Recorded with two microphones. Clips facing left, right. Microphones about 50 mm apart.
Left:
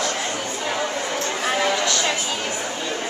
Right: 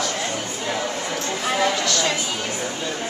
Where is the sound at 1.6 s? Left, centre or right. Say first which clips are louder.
Even; centre.